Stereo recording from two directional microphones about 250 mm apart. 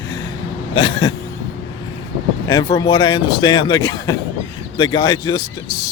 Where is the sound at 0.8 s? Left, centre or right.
Centre.